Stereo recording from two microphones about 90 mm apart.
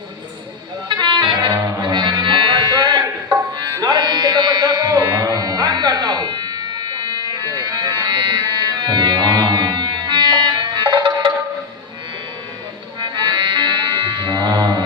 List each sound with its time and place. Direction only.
0.9 s music: 55° right (ahead or behind)
13.0 s music: 50° right (ahead or behind)